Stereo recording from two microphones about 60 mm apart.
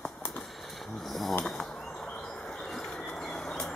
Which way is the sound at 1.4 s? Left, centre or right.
Centre.